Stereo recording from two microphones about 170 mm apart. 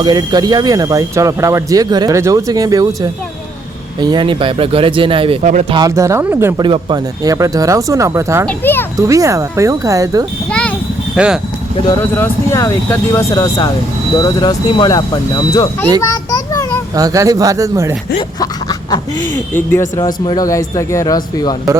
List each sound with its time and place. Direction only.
0.0 s speech: 25° right (ahead or behind)
5.4 s speech: 45° right (ahead or behind)
5.7 s speech: 20° right (ahead or behind)
8.4 s a child's voice: 10° left (ahead or behind)
9.0 s speech: 20° right (ahead or behind)
10.5 s a child's voice: 5° left (ahead or behind)
11.1 s speech: 5° right (ahead or behind)
11.8 s speech: 20° left (ahead or behind)
16.0 s a sound: 20° left (ahead or behind)
16.9 s speech: 20° right (ahead or behind)
18.3 s a sound: 20° left (ahead or behind)
19.5 s speech: 15° left (ahead or behind)